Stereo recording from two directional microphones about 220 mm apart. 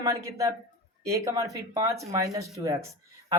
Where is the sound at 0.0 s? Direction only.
15° right (ahead or behind).